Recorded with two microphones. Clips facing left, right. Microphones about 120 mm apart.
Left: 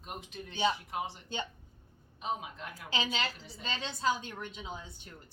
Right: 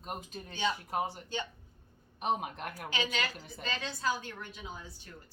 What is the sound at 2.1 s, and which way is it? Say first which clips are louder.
Speech: right 4 dB; 65° right (ahead or behind).